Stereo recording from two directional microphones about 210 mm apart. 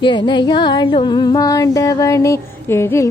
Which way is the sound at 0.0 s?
20° left (ahead or behind).